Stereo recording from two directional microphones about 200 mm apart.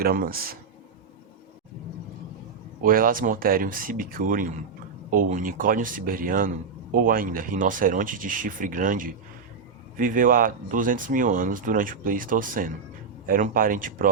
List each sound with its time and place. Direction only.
0.0 s speech: 50° right (ahead or behind)
2.8 s speech: 45° right (ahead or behind)